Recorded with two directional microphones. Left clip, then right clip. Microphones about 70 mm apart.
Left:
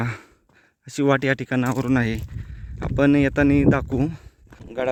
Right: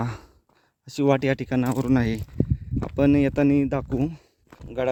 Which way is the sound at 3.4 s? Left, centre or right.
Left.